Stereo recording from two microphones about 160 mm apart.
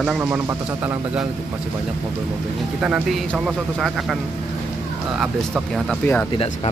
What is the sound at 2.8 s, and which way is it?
Speech, 5° right (ahead or behind).